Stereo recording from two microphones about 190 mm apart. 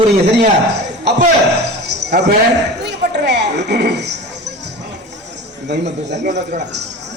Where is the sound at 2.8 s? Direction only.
65° right (ahead or behind).